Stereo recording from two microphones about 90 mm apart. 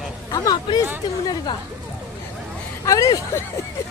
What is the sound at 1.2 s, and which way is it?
Speech, 45° left (ahead or behind).